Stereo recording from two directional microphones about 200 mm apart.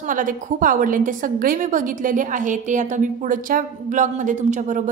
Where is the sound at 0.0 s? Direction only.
40° right (ahead or behind).